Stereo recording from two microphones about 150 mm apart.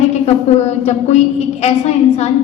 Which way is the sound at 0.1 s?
45° left (ahead or behind).